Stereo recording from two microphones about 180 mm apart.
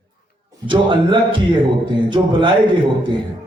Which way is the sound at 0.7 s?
25° right (ahead or behind).